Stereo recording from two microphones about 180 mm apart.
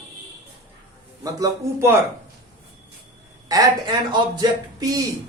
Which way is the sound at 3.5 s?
25° right (ahead or behind).